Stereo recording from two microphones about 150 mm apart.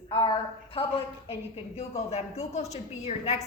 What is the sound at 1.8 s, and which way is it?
Speech, 45° left (ahead or behind).